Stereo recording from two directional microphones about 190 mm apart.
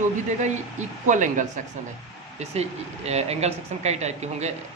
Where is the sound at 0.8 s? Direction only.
40° right (ahead or behind).